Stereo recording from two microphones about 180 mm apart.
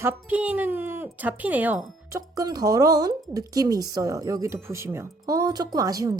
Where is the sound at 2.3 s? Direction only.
20° right (ahead or behind).